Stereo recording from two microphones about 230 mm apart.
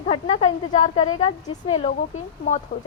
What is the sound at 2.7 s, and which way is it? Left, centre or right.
Speech, left.